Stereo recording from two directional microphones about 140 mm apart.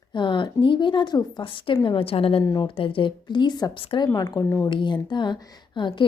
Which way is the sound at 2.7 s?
40° left (ahead or behind).